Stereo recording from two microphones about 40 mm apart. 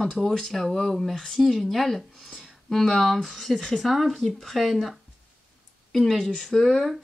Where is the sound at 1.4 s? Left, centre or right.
Centre.